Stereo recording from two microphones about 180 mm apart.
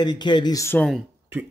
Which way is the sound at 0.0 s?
25° left (ahead or behind).